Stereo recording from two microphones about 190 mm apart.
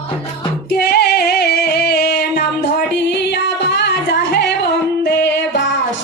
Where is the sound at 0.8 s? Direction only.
60° left (ahead or behind).